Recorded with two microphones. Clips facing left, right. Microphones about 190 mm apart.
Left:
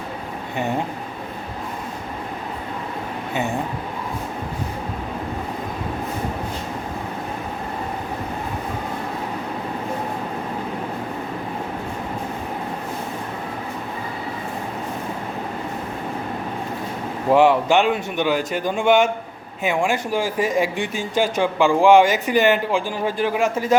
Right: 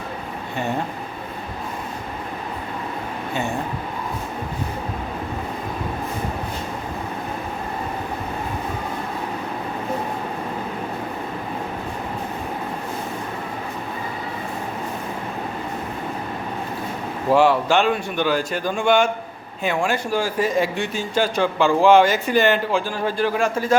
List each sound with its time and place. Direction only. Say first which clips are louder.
17.3 s speech: left 1 dB; 20° left (ahead or behind)